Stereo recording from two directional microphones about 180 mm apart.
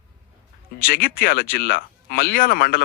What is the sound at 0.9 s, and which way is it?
Speech, 55° left (ahead or behind).